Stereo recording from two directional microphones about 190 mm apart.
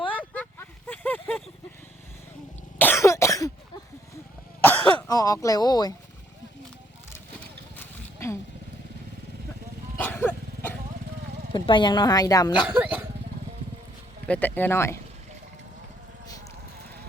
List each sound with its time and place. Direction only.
0.9 s a sound: 10° left (ahead or behind)
2.7 s cough: 10° left (ahead or behind)
4.6 s cough: 10° left (ahead or behind)
5.0 s a woman's voice: 20° left (ahead or behind)
7.8 s a sound: 15° left (ahead or behind)
10.0 s a sound: 10° left (ahead or behind)
11.5 s a woman's voice: 25° left (ahead or behind)
12.5 s dog: 5° right (ahead or behind)
14.3 s speech: 10° left (ahead or behind)